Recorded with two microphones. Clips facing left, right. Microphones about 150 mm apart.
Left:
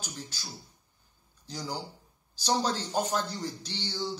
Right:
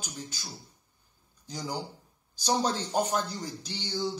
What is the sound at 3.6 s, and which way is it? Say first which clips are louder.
Speech: right 1 dB; 10° right (ahead or behind).